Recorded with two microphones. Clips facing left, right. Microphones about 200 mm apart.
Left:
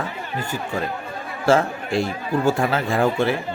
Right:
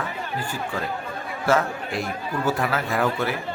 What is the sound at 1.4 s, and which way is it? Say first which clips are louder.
Speech: left 4 dB; 30° left (ahead or behind).